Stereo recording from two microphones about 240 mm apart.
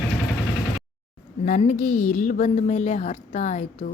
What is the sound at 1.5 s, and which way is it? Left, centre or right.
A woman's voice, left.